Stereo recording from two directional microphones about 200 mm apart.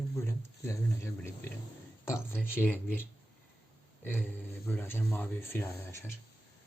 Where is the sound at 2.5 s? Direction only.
10° left (ahead or behind).